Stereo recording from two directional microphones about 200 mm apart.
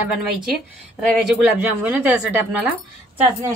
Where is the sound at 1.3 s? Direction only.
10° right (ahead or behind).